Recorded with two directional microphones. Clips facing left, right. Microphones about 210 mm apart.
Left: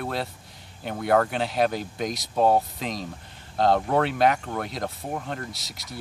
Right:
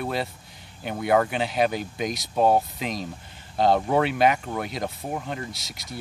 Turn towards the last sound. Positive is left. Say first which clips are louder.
# right 1 dB
turn(degrees=0)  # may be behind; listen again after turning